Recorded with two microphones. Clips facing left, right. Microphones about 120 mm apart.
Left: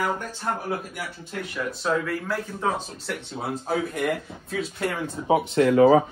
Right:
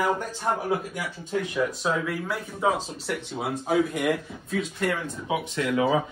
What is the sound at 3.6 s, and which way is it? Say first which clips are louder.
Speech: right 3 dB; centre (ahead or behind).